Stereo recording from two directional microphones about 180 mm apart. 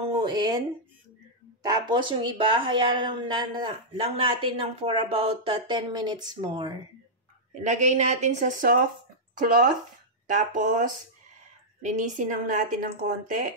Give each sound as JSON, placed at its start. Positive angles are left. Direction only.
{"t": 0.2, "sound": "speech", "side_deg": -20}
{"t": 1.6, "sound": "speech", "side_deg": -25}
{"t": 7.6, "sound": "a woman's voice", "side_deg": -40}
{"t": 10.2, "sound": "speech", "side_deg": -45}